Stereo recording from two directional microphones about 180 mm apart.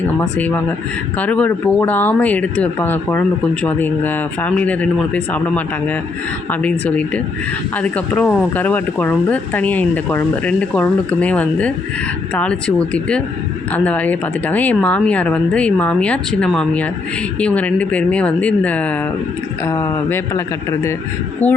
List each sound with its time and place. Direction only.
0.2 s speech: 10° left (ahead or behind)